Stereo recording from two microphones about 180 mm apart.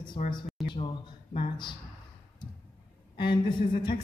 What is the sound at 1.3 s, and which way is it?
Speech, 25° left (ahead or behind).